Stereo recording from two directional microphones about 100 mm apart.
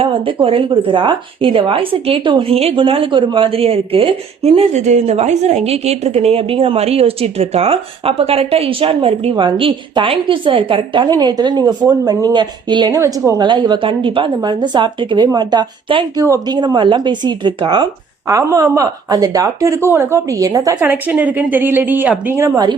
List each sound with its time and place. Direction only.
0.4 s a woman's voice: 65° right (ahead or behind)
5.0 s a woman's voice: 90° right; by 9.3 s 70° right (ahead or behind)
9.3 s a woman's voice: 55° right (ahead or behind)
11.2 s a woman's voice: 45° right (ahead or behind)
13.0 s a woman's voice: 30° right (ahead or behind)
13.4 s a woman's voice: 50° right (ahead or behind)
16.1 s a woman's voice: 35° right (ahead or behind)
18.3 s a woman's voice: 35° right (ahead or behind)
20.8 s a woman's voice: 15° right (ahead or behind)